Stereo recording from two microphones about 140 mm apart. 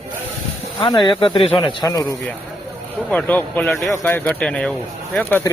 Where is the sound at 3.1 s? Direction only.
10° left (ahead or behind).